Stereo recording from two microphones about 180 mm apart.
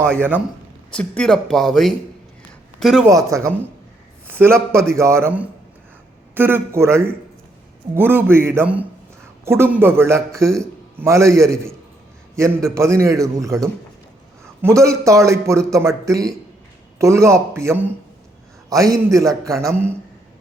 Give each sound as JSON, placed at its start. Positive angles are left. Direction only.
{"t": 0.0, "sound": "speech", "side_deg": 5}
{"t": 3.1, "sound": "a man's voice", "side_deg": -15}
{"t": 12.6, "sound": "a man's voice", "side_deg": -15}